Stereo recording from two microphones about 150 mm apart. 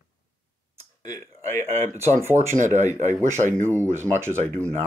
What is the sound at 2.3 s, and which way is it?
Speech, 55° right (ahead or behind).